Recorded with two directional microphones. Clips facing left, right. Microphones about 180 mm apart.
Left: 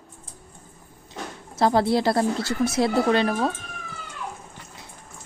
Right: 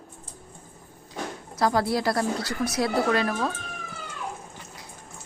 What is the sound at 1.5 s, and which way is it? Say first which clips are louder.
Speech: left 4 dB; 25° left (ahead or behind).